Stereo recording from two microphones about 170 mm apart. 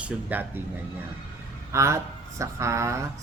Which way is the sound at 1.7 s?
15° right (ahead or behind).